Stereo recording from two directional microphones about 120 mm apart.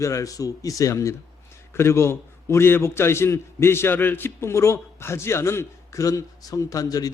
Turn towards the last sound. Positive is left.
turn(degrees=30)  # may be behind; listen again after turning